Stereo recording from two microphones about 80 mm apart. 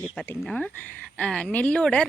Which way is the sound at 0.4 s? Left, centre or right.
Centre.